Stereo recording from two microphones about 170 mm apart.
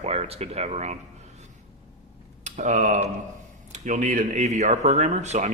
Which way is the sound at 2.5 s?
45° right (ahead or behind).